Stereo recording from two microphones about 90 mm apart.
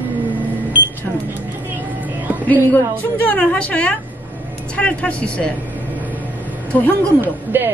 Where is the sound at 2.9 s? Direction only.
20° left (ahead or behind).